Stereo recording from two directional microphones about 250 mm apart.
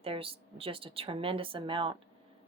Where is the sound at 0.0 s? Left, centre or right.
Right.